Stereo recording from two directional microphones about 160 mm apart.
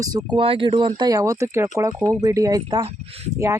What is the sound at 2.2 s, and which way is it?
Speech, 20° right (ahead or behind).